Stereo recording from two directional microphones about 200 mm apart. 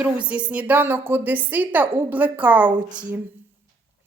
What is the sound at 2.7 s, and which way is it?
Speech, 20° right (ahead or behind).